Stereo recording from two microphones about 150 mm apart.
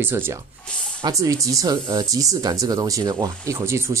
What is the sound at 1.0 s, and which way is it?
Speech, 25° right (ahead or behind).